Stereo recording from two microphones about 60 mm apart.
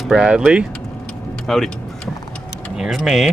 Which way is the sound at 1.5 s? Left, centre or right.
Centre.